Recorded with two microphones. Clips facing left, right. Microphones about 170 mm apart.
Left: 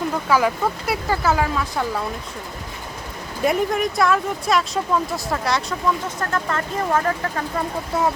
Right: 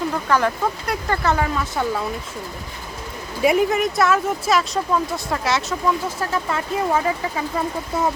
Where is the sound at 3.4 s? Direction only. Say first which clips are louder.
Right 2 dB; 5° right (ahead or behind).